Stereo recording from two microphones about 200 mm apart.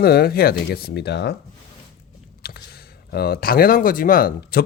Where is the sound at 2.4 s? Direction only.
50° left (ahead or behind).